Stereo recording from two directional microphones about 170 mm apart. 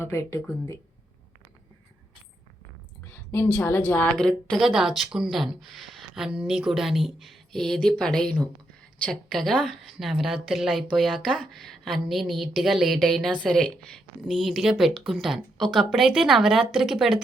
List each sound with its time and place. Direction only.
0.0 s a woman's voice: 15° left (ahead or behind)
3.0 s a woman's voice: 15° left (ahead or behind); by 17.2 s centre (ahead or behind)